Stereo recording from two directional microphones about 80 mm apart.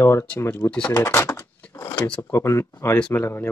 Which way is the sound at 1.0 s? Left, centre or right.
Left.